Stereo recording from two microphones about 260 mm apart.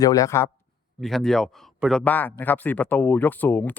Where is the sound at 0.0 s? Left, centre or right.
Centre.